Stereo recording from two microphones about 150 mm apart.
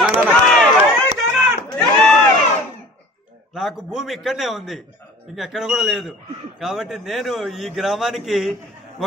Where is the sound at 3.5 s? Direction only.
Centre (ahead or behind).